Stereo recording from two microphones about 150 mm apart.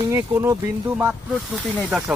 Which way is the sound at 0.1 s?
20° right (ahead or behind).